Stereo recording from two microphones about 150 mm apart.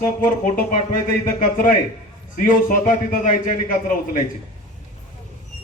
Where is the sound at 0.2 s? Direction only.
60° left (ahead or behind).